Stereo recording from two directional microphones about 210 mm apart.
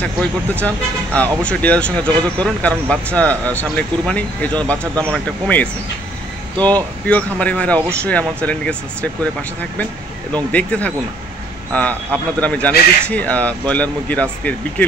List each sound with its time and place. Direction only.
0.0 s speech: 5° left (ahead or behind)
10.3 s speech: 5° left (ahead or behind)